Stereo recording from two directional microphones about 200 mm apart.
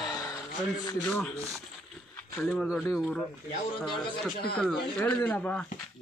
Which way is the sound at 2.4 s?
Centre (ahead or behind).